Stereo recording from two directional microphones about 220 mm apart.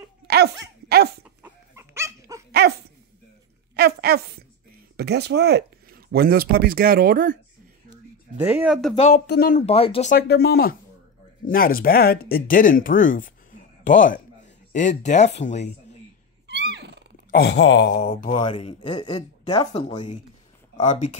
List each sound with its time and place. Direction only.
0.3 s dog: 45° right (ahead or behind)
1.2 s dog: 10° right (ahead or behind)
3.7 s a sound: 45° right (ahead or behind)
4.9 s speech: 50° right (ahead or behind)
8.4 s speech: 5° right (ahead or behind)
8.9 s speech: 30° left (ahead or behind)
9.3 s speech: 45° left (ahead or behind)
9.6 s speech: 25° left (ahead or behind)
10.1 s speech: 45° left (ahead or behind); by 15.7 s 30° left (ahead or behind)
16.4 s cat: 50° right (ahead or behind)
17.3 s speech: 50° left (ahead or behind)
17.9 s speech: 30° left (ahead or behind)